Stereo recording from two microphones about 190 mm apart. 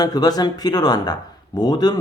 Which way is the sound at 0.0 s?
20° left (ahead or behind).